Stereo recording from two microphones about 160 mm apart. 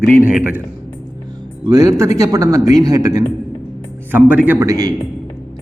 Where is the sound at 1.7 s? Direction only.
20° right (ahead or behind).